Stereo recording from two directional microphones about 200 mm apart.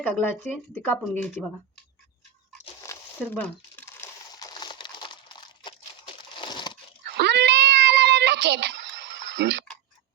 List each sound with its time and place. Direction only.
0.2 s speech: 10° left (ahead or behind)
2.8 s crumpling: 10° left (ahead or behind)
7.2 s cat: 60° right (ahead or behind)